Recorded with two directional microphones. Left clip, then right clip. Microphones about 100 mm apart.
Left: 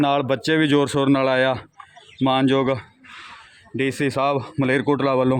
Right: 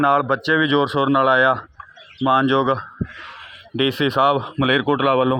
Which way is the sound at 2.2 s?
35° left (ahead or behind).